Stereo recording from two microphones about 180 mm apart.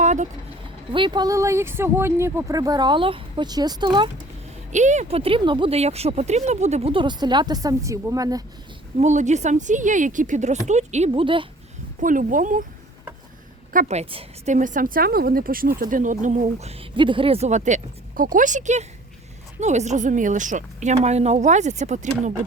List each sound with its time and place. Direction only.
0.0 s vehicle: 40° right (ahead or behind)
0.9 s speech: 25° right (ahead or behind)
4.7 s speech: 40° right (ahead or behind); by 8.4 s 20° right (ahead or behind)
9.0 s a woman's voice: 40° right (ahead or behind)
11.9 s a woman's voice: 45° right (ahead or behind)
13.7 s a woman's voice: 40° right (ahead or behind)